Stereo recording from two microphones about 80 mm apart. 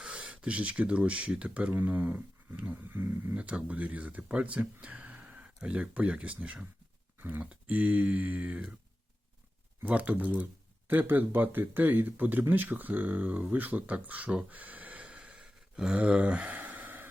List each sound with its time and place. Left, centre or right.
0.0 s speech: centre; by 3.3 s right
3.3 s speech: centre
9.8 s speech: centre
15.0 s a sound: centre